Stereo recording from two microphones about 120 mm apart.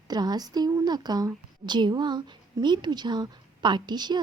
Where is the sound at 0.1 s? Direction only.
35° right (ahead or behind).